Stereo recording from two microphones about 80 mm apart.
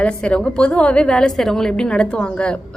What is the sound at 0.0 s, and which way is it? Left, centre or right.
A woman's voice, centre.